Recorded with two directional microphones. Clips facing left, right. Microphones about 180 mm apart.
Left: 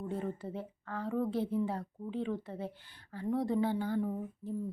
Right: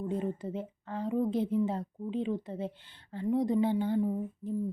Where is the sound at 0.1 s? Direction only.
20° right (ahead or behind).